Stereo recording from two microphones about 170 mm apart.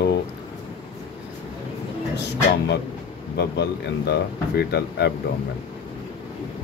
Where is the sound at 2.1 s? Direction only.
90° left.